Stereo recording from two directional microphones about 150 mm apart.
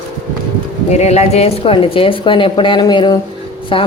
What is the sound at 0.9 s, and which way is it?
A woman's voice, 45° left (ahead or behind).